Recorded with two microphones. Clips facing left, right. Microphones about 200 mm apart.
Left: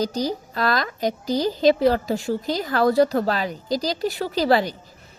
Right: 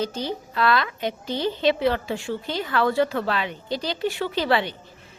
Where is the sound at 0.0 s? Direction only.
40° left (ahead or behind).